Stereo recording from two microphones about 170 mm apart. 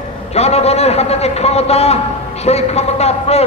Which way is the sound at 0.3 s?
40° left (ahead or behind).